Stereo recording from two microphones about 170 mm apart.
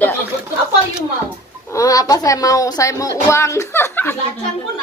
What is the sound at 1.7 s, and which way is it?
Speech, 20° left (ahead or behind).